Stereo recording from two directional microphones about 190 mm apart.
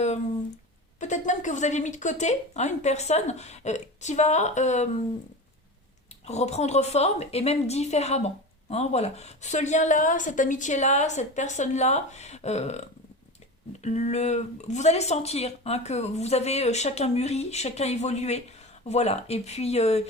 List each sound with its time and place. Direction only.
0.9 s speech: 40° left (ahead or behind)
6.2 s speech: 35° left (ahead or behind)
13.8 s speech: 35° left (ahead or behind)